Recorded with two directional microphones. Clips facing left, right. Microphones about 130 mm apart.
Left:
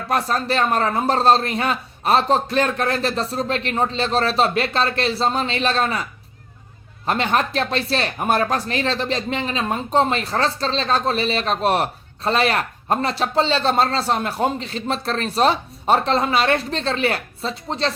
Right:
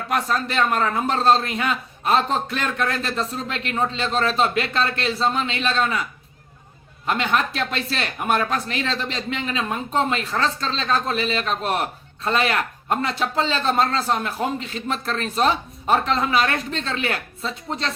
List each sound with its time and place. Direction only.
0.1 s speech: 35° left (ahead or behind)